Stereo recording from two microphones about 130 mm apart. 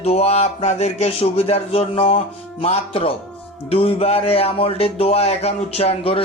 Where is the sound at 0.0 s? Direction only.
50° left (ahead or behind).